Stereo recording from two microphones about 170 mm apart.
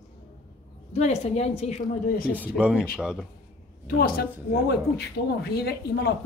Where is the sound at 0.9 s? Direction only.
40° left (ahead or behind).